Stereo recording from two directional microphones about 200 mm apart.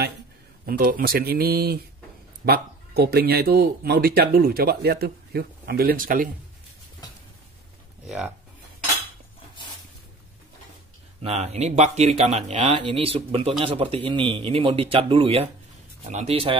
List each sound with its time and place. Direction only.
0.7 s speech: 45° right (ahead or behind)
11.2 s speech: 35° right (ahead or behind)